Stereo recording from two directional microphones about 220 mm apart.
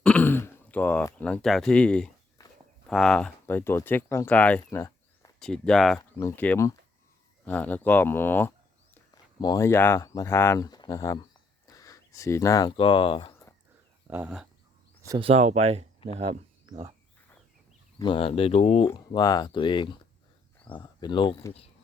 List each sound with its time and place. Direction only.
0.0 s speech: 5° left (ahead or behind)
2.4 s walk: 15° left (ahead or behind)
2.8 s speech: centre (ahead or behind); by 13.5 s 20° left (ahead or behind)
14.1 s speech: 5° right (ahead or behind)
15.0 s speech: 15° right (ahead or behind)
15.3 s speech: 30° right (ahead or behind)
18.0 s speech: 25° left (ahead or behind)